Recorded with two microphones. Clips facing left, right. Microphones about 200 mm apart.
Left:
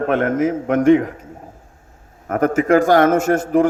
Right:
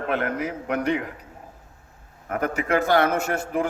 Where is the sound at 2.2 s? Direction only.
45° left (ahead or behind).